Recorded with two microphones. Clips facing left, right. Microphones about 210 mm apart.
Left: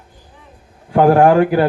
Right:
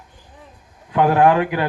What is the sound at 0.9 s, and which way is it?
Speech, 30° left (ahead or behind).